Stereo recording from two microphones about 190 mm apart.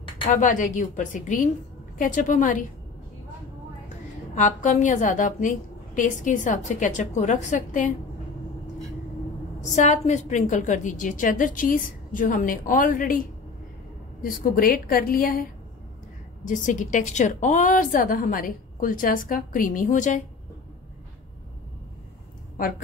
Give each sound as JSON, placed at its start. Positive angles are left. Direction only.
{"t": 0.4, "sound": "a woman's voice", "side_deg": 40}
{"t": 4.4, "sound": "a woman's voice", "side_deg": 40}
{"t": 9.6, "sound": "a woman's voice", "side_deg": 40}
{"t": 14.2, "sound": "a woman's voice", "side_deg": 50}
{"t": 16.4, "sound": "a woman's voice", "side_deg": 40}